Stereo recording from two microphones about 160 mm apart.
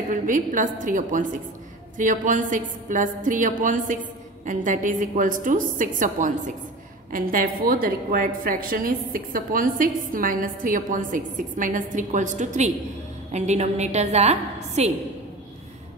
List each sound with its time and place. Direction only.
0.1 s a woman's voice: 55° right (ahead or behind)